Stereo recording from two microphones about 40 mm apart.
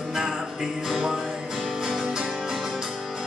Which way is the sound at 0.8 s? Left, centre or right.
Centre.